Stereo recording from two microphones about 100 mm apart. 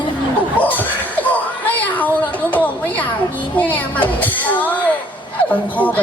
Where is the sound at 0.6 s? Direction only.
15° left (ahead or behind).